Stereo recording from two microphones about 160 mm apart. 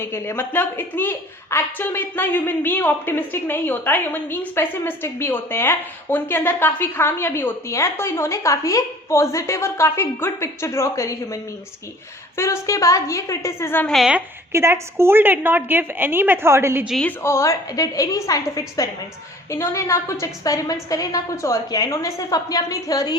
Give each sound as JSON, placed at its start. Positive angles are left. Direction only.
{"t": 0.0, "sound": "a woman's voice", "side_deg": 15}
{"t": 12.4, "sound": "a woman's voice", "side_deg": 15}
{"t": 13.9, "sound": "a woman's voice", "side_deg": 0}
{"t": 14.5, "sound": "a woman's voice", "side_deg": -15}
{"t": 16.8, "sound": "a woman's voice", "side_deg": 0}
{"t": 17.1, "sound": "a woman's voice", "side_deg": 15}